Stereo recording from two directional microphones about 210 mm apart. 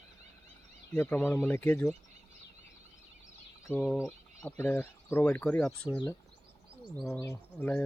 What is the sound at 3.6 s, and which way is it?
Speech, 5° left (ahead or behind).